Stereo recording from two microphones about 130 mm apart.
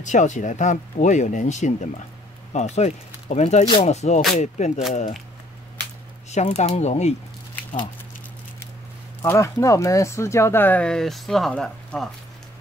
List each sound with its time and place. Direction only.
0.0 s speech: 70° left (ahead or behind)
6.3 s speech: 60° left (ahead or behind)
9.2 s speech: 25° left (ahead or behind); by 12.1 s 5° left (ahead or behind)